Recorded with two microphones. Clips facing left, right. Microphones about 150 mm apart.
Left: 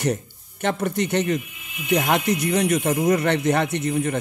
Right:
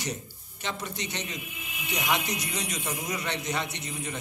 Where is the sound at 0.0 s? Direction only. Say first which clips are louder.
Left 11 dB; 55° left (ahead or behind).